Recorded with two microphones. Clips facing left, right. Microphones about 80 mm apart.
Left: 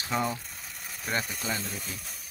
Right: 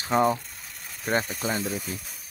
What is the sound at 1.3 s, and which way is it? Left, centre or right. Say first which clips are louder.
Speech: right 5 dB; right.